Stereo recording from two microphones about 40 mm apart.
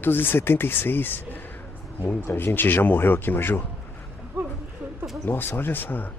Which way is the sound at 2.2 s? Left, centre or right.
Left.